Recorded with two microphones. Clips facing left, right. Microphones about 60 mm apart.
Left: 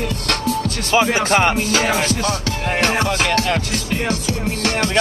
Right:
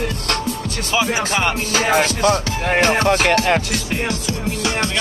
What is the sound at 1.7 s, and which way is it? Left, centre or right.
Music, right.